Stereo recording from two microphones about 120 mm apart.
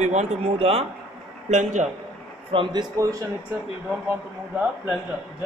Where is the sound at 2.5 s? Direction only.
50° right (ahead or behind).